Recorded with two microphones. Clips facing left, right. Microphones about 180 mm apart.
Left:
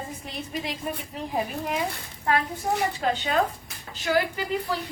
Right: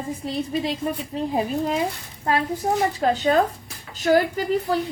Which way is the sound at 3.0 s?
40° right (ahead or behind).